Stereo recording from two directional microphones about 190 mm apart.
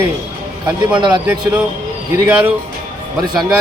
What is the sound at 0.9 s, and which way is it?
Speech, 25° right (ahead or behind).